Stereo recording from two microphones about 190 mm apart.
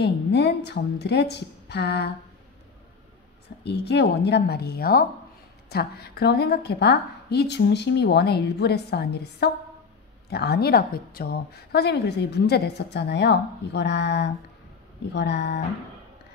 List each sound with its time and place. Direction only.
0.0 s a woman's voice: 60° left (ahead or behind)
3.6 s a woman's voice: 60° left (ahead or behind)